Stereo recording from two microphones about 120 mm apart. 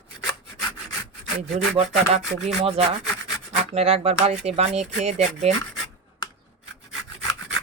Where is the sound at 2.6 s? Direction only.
50° right (ahead or behind).